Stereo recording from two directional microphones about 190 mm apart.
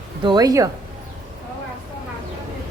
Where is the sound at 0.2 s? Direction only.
20° right (ahead or behind).